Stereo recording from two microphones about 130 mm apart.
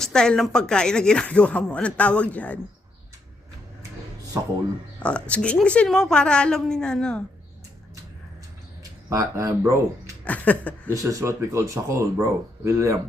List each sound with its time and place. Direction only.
0.0 s speech: 5° left (ahead or behind)
4.4 s speech: 25° right (ahead or behind)
5.0 s speech: 10° left (ahead or behind)
8.8 s speech: 25° right (ahead or behind)
10.2 s speech: 10° left (ahead or behind)
10.8 s speech: 25° right (ahead or behind)